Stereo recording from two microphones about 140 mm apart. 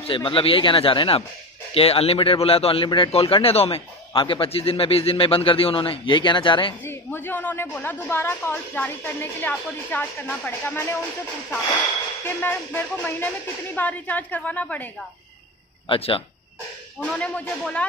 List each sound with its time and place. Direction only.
0.0 s a man's voice: 40° left (ahead or behind)
6.8 s a woman's voice: 15° left (ahead or behind)
12.3 s a woman's voice: 15° left (ahead or behind)
15.9 s a man's voice: 40° left (ahead or behind)
17.0 s a woman's voice: 5° left (ahead or behind)